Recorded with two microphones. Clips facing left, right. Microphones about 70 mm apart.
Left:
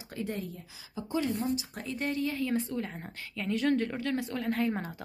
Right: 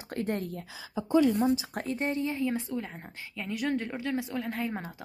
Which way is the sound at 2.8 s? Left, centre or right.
Centre.